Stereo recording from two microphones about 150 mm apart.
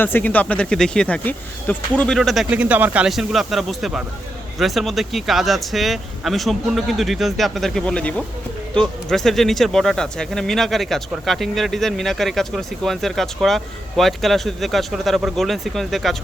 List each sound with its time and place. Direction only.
0.0 s speech: 10° left (ahead or behind)